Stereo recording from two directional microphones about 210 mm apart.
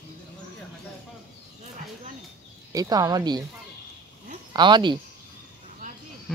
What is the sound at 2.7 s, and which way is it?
Speech, 20° right (ahead or behind).